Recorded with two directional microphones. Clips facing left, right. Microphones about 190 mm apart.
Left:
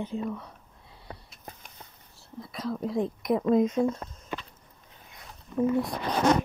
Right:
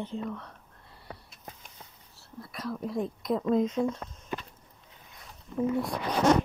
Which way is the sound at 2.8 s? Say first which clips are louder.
Left 3 dB; 25° left (ahead or behind).